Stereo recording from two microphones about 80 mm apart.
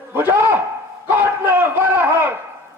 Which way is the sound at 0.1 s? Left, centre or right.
Right.